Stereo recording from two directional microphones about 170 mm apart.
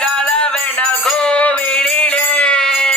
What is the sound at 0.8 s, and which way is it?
Mantra, 5° left (ahead or behind).